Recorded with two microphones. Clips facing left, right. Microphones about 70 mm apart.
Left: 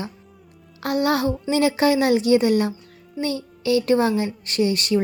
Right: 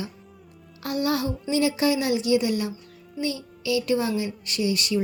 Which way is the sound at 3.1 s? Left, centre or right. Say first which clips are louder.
Left 3 dB; left.